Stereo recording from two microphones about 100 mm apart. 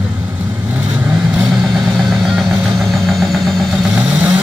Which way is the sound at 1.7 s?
5° right (ahead or behind).